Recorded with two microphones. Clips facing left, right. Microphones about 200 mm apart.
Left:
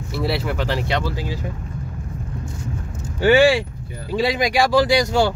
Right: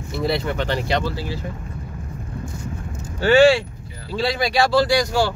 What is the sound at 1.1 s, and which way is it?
Speech, 15° left (ahead or behind).